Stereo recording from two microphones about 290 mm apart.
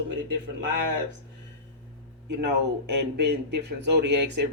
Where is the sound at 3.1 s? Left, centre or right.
Right.